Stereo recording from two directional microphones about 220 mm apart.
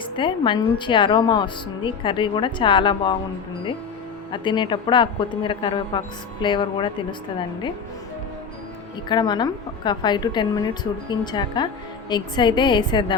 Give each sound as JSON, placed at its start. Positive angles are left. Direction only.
{"t": 0.0, "sound": "a woman's voice", "side_deg": 20}
{"t": 4.3, "sound": "a woman's voice", "side_deg": 20}
{"t": 9.0, "sound": "a woman's voice", "side_deg": 20}